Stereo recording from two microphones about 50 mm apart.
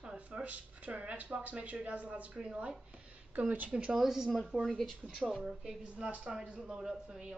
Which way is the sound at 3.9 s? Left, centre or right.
Centre.